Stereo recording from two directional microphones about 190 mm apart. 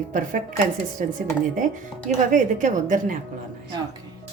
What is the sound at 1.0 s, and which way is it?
Speech, 45° right (ahead or behind).